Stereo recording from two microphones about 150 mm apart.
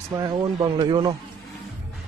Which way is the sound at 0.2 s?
30° right (ahead or behind).